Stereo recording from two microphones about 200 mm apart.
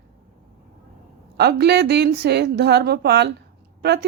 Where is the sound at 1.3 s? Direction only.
55° right (ahead or behind).